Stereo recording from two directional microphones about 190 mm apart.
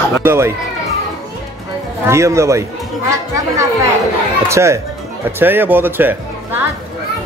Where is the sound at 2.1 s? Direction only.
15° right (ahead or behind).